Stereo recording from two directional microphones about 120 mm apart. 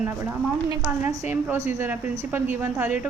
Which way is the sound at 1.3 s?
20° right (ahead or behind).